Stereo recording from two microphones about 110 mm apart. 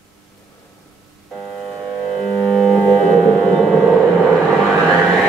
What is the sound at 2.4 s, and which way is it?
Music, centre (ahead or behind).